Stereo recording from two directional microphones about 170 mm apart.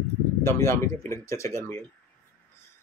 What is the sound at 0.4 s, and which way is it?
Speech, 15° left (ahead or behind).